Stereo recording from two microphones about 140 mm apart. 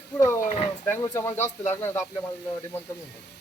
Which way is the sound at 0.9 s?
20° left (ahead or behind).